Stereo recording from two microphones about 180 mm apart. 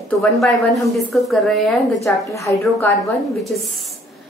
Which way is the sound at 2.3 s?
15° left (ahead or behind).